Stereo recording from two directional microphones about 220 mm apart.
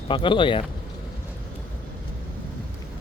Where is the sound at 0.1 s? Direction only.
20° left (ahead or behind).